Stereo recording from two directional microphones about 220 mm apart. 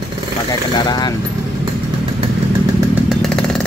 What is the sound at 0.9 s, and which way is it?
Speech, 20° left (ahead or behind).